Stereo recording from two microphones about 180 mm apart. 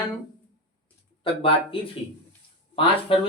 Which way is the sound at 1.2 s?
30° left (ahead or behind).